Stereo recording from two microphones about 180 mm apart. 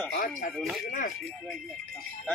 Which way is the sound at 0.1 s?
55° left (ahead or behind).